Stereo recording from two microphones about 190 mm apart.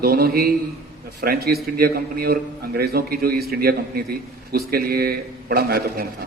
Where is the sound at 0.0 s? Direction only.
55° right (ahead or behind).